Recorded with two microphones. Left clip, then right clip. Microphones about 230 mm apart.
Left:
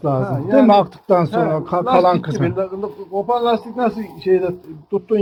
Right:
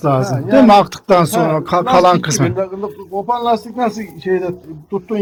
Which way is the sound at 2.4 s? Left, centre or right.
Right.